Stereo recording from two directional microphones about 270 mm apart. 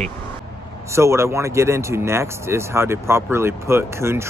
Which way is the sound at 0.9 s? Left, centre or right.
Centre.